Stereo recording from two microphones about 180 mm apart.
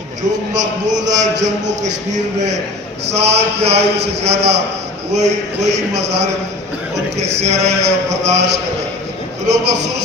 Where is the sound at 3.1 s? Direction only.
35° right (ahead or behind).